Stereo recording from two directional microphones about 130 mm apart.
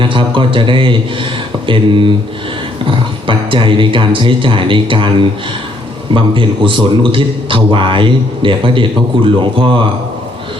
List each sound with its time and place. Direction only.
0.0 s a man's voice: 40° right (ahead or behind)
3.2 s a man's voice: 40° right (ahead or behind)
6.1 s a man's voice: 40° right (ahead or behind)